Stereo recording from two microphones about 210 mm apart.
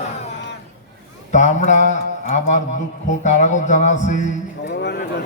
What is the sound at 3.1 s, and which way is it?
Mantra, 35° left (ahead or behind).